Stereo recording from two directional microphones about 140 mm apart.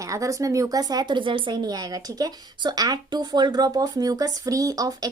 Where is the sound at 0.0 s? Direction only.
25° right (ahead or behind).